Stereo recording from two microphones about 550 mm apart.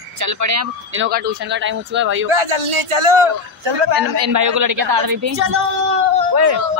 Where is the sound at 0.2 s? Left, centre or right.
Right.